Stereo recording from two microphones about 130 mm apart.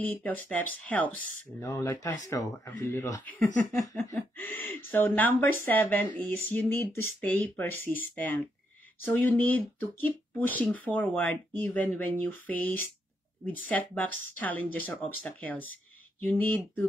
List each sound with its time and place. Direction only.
0.0 s speech: 15° left (ahead or behind)